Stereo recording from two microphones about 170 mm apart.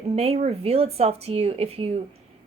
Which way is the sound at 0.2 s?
35° right (ahead or behind).